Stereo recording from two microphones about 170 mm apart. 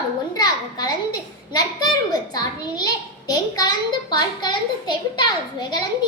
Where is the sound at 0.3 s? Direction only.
20° left (ahead or behind).